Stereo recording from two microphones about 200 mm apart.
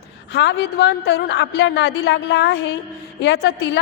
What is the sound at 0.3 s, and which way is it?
A woman's voice, 60° left (ahead or behind).